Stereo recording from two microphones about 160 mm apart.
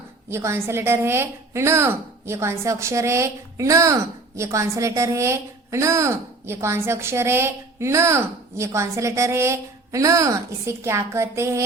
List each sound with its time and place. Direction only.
0.3 s a woman's voice: 15° right (ahead or behind)